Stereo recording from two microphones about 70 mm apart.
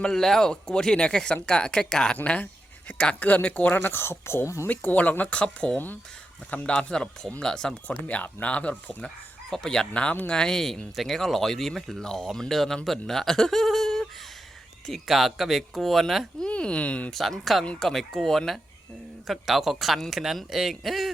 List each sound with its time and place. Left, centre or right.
0.0 s speech: centre; by 4.7 s left
4.7 s speech: left; by 7.8 s centre
7.9 s speech: left
9.0 s speech: centre
16.5 s speech: centre
17.1 s speech: centre